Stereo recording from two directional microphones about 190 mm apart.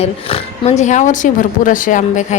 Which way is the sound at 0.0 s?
30° left (ahead or behind).